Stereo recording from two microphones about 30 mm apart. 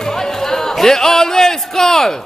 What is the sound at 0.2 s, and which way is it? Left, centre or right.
A man's voice, centre.